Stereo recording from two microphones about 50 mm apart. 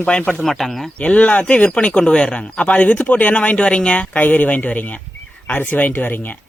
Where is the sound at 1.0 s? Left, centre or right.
Left.